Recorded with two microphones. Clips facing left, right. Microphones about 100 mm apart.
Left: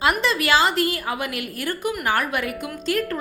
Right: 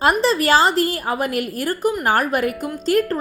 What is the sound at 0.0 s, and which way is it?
A woman's voice, 35° right (ahead or behind).